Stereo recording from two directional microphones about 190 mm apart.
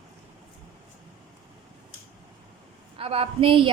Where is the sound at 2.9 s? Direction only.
30° right (ahead or behind).